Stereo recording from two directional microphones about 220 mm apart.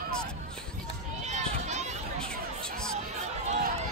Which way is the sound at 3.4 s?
30° right (ahead or behind).